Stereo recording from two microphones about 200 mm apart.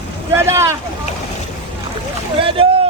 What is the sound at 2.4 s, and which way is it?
Boat, 25° right (ahead or behind).